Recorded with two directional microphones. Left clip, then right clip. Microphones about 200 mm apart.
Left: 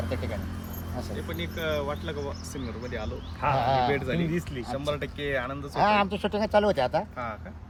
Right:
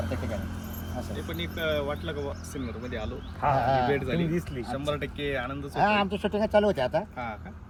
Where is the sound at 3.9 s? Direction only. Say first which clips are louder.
Even; centre (ahead or behind).